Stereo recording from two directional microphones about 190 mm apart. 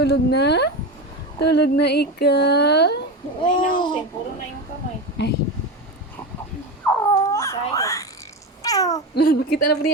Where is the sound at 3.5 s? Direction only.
45° left (ahead or behind).